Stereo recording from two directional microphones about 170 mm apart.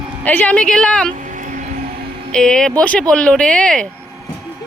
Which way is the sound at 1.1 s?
50° right (ahead or behind).